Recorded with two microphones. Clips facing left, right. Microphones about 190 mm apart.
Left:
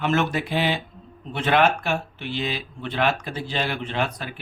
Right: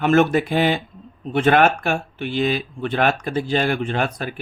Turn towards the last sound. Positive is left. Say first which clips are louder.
# right 4 dB
turn(degrees=-50)  # may be behind; listen again after turning